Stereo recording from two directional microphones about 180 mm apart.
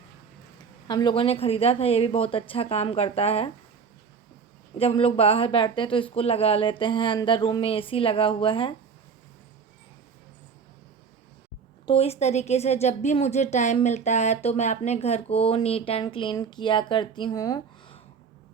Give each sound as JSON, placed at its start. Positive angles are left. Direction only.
{"t": 0.9, "sound": "a woman's voice", "side_deg": 25}
{"t": 4.8, "sound": "speech", "side_deg": 30}
{"t": 11.9, "sound": "a woman's voice", "side_deg": 35}